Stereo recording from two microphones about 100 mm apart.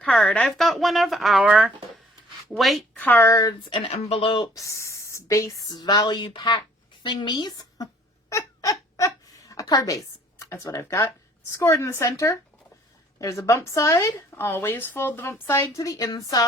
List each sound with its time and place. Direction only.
0.0 s a woman's voice: 10° left (ahead or behind)
0.5 s speech: centre (ahead or behind)
2.5 s speech: centre (ahead or behind)
3.0 s a woman's voice: 15° left (ahead or behind)
3.2 s speech: 35° left (ahead or behind)
3.7 s speech: 70° left (ahead or behind)
4.5 s a woman's voice: 30° left (ahead or behind)
8.3 s a sound: 35° left (ahead or behind)
11.5 s a woman's voice: 30° left (ahead or behind)
15.8 s speech: 35° left (ahead or behind)